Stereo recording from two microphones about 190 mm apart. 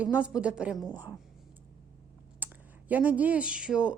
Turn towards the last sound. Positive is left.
turn(degrees=-5)  # may be behind; listen again after turning